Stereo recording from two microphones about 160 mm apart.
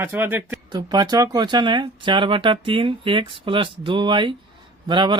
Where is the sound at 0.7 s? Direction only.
25° right (ahead or behind).